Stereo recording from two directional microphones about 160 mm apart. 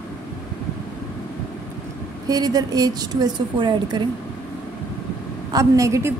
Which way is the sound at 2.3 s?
25° right (ahead or behind).